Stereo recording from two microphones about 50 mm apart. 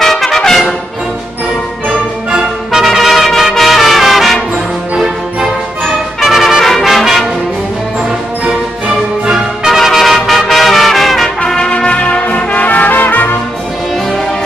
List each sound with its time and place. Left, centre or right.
0.0 s brass instrument: centre
2.7 s brass instrument: centre
4.9 s music: centre
6.2 s brass instrument: centre
9.3 s brass instrument: centre
11.4 s brass instrument: centre; by 13.3 s left